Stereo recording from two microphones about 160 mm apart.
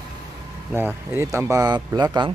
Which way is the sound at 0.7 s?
15° right (ahead or behind).